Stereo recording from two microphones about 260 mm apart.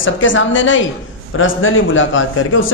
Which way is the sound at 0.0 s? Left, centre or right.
Left.